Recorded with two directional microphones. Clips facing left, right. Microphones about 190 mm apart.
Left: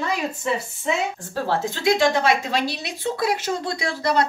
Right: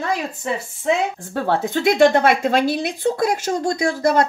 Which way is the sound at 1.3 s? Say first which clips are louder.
Right 4 dB; 55° right (ahead or behind).